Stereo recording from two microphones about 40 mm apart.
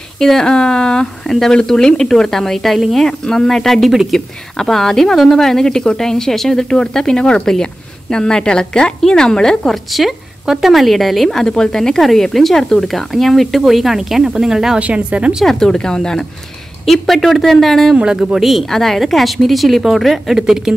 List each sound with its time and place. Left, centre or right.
0.2 s a woman's voice: centre
9.8 s speech: centre
11.2 s a woman's voice: centre
14.8 s a woman's voice: right
15.4 s a woman's voice: centre
16.8 s speech: centre
18.0 s a woman's voice: centre
18.3 s speech: centre
18.7 s speech: centre
20.3 s a woman's voice: centre